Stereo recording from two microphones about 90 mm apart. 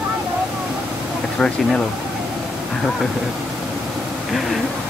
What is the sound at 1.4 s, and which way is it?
Speech, 10° left (ahead or behind).